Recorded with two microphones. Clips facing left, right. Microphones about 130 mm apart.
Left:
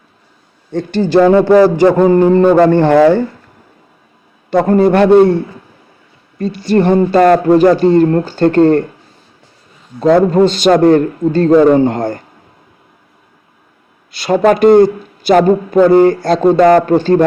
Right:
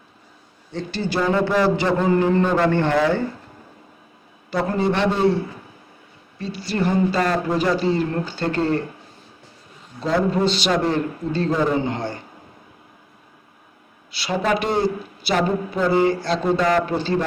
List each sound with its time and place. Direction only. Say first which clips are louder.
0.7 s speech: left 13 dB; 45° left (ahead or behind)
1.6 s a sound: left 10 dB; 45° left (ahead or behind)
2.5 s speech: left 11 dB; 45° left (ahead or behind)
2.8 s speech: left 11 dB; 60° left (ahead or behind)
4.5 s speech: left 11 dB; 50° left (ahead or behind)
6.7 s speech: left 10 dB; 50° left (ahead or behind)
10.0 s speech: left 11 dB; 50° left (ahead or behind)
14.1 s speech: left 11 dB; 50° left (ahead or behind)